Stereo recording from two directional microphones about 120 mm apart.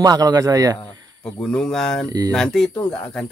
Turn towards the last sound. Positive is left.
turn(degrees=5)  # may be behind; listen again after turning